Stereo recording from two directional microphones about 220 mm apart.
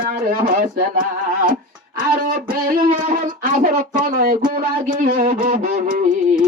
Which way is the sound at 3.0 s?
35° right (ahead or behind).